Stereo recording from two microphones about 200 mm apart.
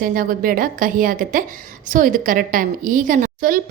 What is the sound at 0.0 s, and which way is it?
A woman's voice, 45° right (ahead or behind).